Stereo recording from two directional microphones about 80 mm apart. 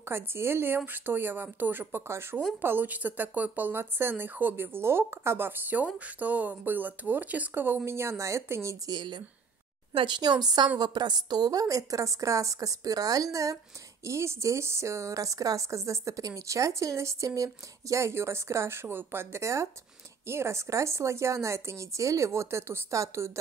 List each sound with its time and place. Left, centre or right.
0.1 s speech: right
8.8 s a woman's voice: right
10.0 s a woman's voice: right